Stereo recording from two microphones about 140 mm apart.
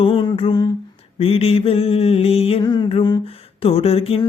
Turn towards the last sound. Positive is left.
turn(degrees=45)  # may be behind; listen again after turning